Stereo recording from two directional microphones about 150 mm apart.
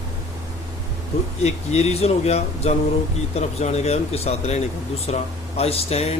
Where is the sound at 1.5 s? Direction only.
45° left (ahead or behind).